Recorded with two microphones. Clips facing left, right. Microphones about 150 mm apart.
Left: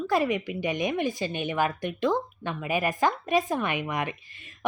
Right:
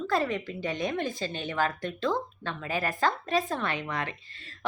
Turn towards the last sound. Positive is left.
turn(degrees=15)  # may be behind; listen again after turning